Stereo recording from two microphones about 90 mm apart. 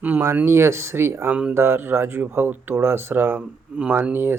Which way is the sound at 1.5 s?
25° right (ahead or behind).